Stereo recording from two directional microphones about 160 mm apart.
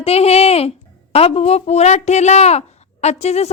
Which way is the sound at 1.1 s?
40° left (ahead or behind).